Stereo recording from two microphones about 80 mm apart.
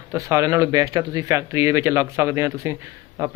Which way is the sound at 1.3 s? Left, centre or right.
Right.